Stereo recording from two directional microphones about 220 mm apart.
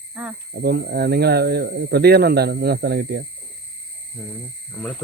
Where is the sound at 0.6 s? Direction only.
45° right (ahead or behind).